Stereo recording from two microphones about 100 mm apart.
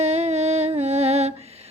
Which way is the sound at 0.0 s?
90° right.